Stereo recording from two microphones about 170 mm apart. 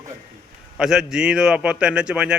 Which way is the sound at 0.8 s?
5° right (ahead or behind).